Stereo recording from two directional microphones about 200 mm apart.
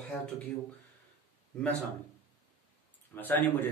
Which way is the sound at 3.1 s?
10° left (ahead or behind).